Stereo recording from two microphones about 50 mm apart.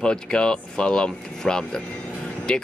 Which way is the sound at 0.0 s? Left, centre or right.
Centre.